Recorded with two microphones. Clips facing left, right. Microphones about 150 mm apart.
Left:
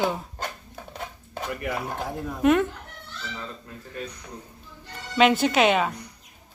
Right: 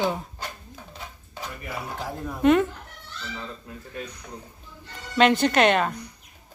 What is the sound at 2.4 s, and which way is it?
Speech, centre (ahead or behind).